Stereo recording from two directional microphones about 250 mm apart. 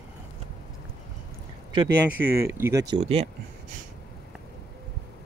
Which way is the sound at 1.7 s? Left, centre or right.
Centre.